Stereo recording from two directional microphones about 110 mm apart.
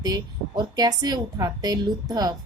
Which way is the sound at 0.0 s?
35° right (ahead or behind).